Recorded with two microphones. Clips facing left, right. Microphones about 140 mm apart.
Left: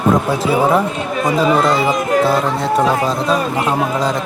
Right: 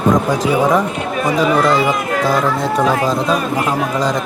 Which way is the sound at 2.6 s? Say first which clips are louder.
Even; centre (ahead or behind).